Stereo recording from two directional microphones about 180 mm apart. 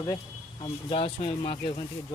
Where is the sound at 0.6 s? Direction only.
30° left (ahead or behind).